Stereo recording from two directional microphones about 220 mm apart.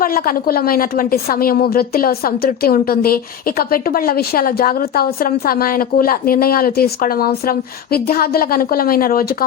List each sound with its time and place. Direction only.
0.0 s a woman's voice: 40° left (ahead or behind)